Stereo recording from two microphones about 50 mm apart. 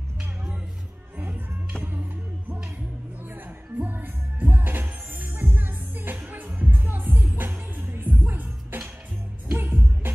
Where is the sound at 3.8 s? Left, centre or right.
Right.